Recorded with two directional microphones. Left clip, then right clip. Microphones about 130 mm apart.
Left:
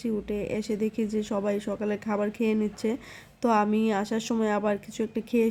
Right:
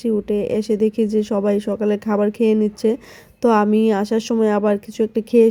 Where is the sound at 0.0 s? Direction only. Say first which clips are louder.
Right 11 dB; 40° right (ahead or behind).